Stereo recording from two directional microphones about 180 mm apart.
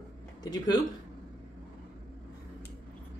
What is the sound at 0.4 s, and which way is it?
Speech, 20° left (ahead or behind).